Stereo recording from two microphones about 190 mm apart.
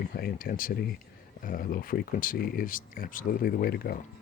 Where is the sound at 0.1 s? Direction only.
50° left (ahead or behind).